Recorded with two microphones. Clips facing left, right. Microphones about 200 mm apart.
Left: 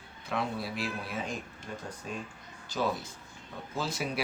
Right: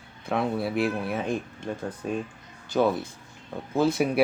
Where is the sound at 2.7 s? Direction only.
55° right (ahead or behind).